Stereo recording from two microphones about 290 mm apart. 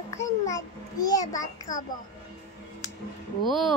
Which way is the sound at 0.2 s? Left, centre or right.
Centre.